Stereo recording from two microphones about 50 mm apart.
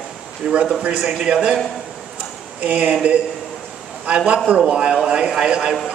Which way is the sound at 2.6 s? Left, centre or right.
Right.